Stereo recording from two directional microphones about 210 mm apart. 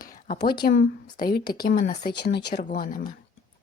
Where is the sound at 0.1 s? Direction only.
40° left (ahead or behind).